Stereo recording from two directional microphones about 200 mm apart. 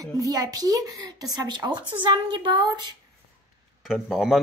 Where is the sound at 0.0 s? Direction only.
20° right (ahead or behind).